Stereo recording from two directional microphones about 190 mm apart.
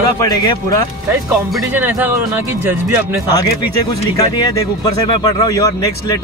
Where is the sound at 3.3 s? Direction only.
20° left (ahead or behind).